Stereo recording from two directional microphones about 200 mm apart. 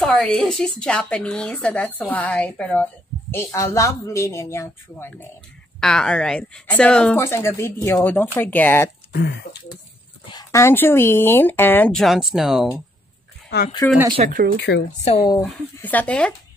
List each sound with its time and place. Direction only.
0.0 s a woman's voice: 5° left (ahead or behind)
9.1 s speech: 55° left (ahead or behind)
10.3 s a woman's voice: 15° left (ahead or behind); by 12.8 s 5° right (ahead or behind)
13.8 s a woman's voice: 15° left (ahead or behind)
14.2 s speech: 35° right (ahead or behind)
14.6 s speech: 60° left (ahead or behind)
15.0 s speech: 20° left (ahead or behind)
15.8 s a woman's voice: 10° left (ahead or behind)